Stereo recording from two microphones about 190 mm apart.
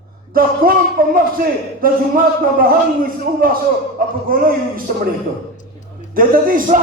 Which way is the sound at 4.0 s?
50° right (ahead or behind).